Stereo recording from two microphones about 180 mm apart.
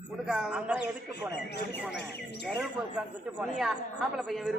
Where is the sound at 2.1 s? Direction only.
65° left (ahead or behind).